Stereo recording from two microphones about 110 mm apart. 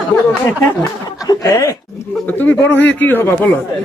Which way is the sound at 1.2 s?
30° left (ahead or behind).